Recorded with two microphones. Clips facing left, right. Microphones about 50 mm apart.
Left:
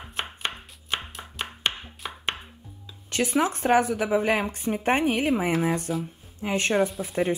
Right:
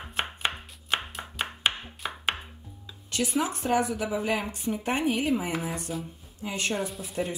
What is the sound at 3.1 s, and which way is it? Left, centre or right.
A woman's voice, left.